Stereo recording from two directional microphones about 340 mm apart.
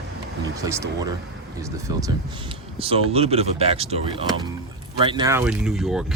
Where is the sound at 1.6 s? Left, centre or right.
Centre.